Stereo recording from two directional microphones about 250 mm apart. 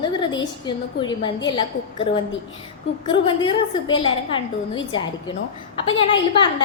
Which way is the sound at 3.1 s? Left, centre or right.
Centre.